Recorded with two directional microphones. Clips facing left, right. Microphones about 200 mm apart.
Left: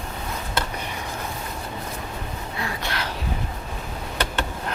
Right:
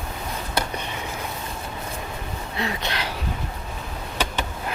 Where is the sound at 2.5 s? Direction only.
20° right (ahead or behind).